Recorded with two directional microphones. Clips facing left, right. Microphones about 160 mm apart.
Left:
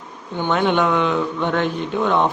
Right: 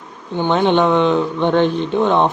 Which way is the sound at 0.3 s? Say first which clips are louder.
Right 4 dB; 20° right (ahead or behind).